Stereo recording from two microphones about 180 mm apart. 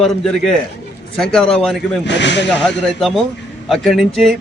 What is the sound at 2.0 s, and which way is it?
Speech, 75° left (ahead or behind).